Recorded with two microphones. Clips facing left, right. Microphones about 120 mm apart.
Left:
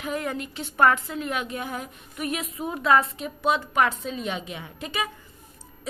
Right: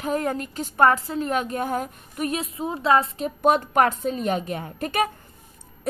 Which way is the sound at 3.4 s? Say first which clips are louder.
Right 4 dB; 50° right (ahead or behind).